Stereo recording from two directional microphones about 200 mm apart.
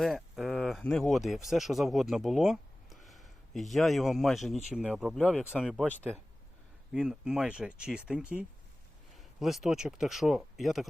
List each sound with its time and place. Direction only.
0.0 s speech: centre (ahead or behind)
6.9 s speech: 5° right (ahead or behind)